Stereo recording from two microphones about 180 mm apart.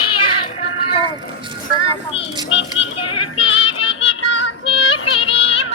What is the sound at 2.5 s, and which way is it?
Music, 90° left.